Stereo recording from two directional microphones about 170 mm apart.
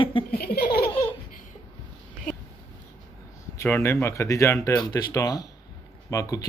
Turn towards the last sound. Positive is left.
turn(degrees=20)  # may be behind; listen again after turning